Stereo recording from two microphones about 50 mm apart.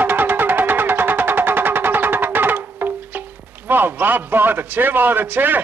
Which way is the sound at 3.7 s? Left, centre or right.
Right.